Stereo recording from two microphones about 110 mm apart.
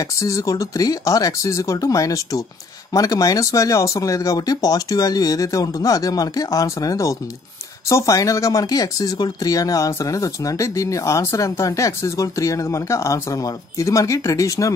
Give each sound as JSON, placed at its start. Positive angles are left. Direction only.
{"t": 0.0, "sound": "speech", "side_deg": 30}